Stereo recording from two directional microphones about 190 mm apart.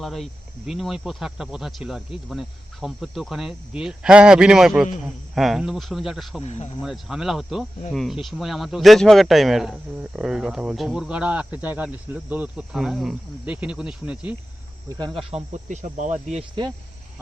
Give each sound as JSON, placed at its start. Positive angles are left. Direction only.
{"t": 0.0, "sound": "speech", "side_deg": 0}
{"t": 6.4, "sound": "speech", "side_deg": 35}
{"t": 6.8, "sound": "speech", "side_deg": 0}
{"t": 14.9, "sound": "cricket", "side_deg": -25}
{"t": 15.7, "sound": "cricket", "side_deg": -40}
{"t": 16.6, "sound": "cricket", "side_deg": -25}